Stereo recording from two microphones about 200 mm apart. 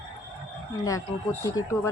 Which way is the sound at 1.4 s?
15° left (ahead or behind).